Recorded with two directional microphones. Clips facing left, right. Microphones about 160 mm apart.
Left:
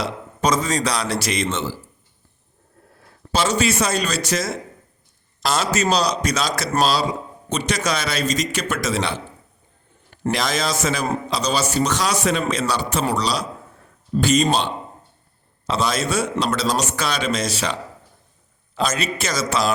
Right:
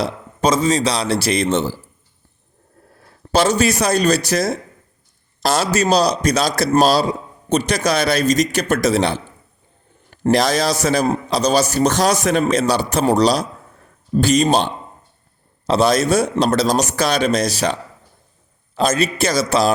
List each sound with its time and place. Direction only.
0.0 s a man's voice: 30° right (ahead or behind)
3.3 s speech: 40° right (ahead or behind)
10.3 s a man's voice: 35° right (ahead or behind)
15.6 s speech: 35° right (ahead or behind)
18.9 s speech: 35° right (ahead or behind)